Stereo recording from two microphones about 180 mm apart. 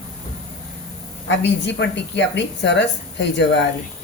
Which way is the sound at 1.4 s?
75° left (ahead or behind).